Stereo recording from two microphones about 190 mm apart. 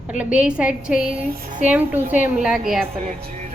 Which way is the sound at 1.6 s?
10° right (ahead or behind).